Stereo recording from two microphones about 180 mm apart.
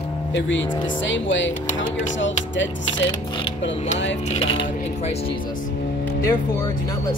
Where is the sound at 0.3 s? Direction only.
90° left.